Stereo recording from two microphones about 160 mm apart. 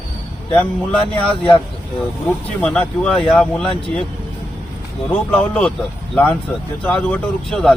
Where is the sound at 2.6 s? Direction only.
5° left (ahead or behind).